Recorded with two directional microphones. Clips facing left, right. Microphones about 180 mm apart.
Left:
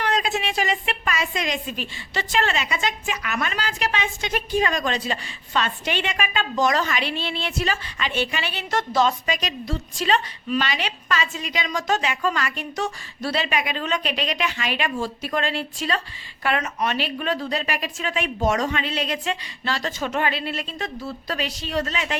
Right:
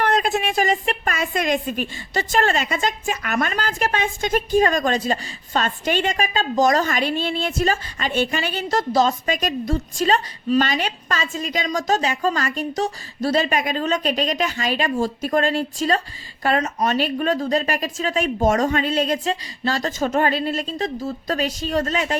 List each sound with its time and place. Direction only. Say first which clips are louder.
0.0 s a woman's voice: right 4 dB; 55° right (ahead or behind)